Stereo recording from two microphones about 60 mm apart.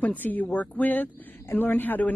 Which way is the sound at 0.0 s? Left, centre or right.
Left.